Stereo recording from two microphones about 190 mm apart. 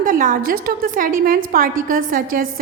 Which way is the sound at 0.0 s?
45° right (ahead or behind).